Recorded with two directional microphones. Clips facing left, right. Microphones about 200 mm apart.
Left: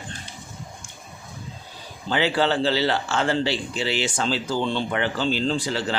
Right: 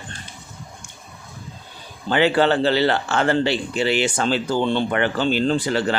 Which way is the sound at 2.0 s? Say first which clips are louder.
Right 5 dB; 55° right (ahead or behind).